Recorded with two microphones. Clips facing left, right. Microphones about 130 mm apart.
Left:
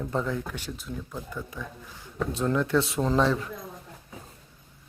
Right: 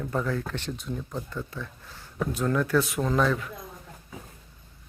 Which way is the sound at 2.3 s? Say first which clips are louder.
Even; 25° left (ahead or behind).